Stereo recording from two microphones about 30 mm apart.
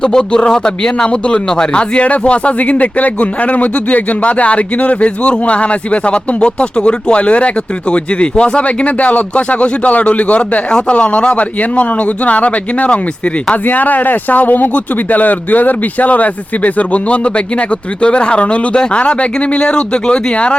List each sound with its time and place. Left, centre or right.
0.0 s speech: left
2.6 s speech: left
10.7 s speech: left
11.3 s speech: left
13.7 s speech: left